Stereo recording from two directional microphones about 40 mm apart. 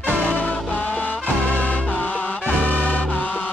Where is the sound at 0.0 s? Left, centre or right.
Left.